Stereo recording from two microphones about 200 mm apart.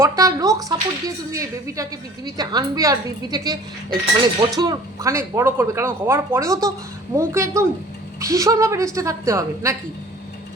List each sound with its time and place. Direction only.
0.0 s speech: 15° right (ahead or behind)